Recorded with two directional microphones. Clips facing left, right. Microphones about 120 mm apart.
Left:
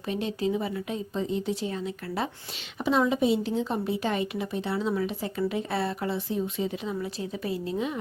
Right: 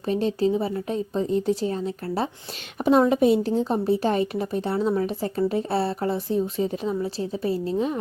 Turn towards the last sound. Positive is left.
turn(degrees=-35)  # may be behind; listen again after turning